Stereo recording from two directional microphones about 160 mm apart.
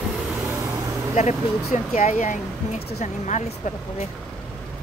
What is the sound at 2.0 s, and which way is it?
Speech, 45° left (ahead or behind).